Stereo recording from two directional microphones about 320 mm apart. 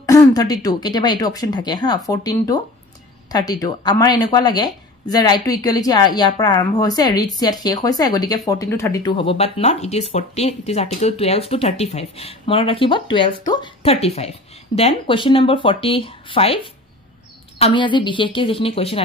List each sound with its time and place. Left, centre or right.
0.0 s speech: centre